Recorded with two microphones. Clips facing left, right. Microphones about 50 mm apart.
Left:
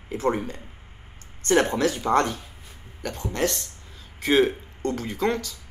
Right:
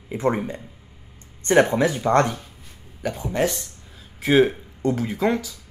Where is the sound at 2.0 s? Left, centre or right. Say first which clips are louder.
Right 3 dB; centre.